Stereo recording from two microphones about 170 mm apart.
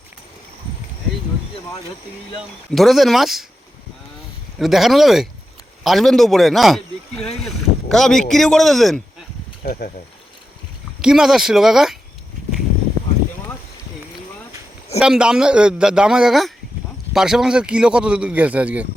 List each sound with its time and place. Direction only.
2.7 s speech: centre (ahead or behind)
4.5 s speech: centre (ahead or behind)
9.6 s speech: 55° left (ahead or behind)
11.0 s speech: 5° right (ahead or behind)
14.9 s speech: 5° right (ahead or behind)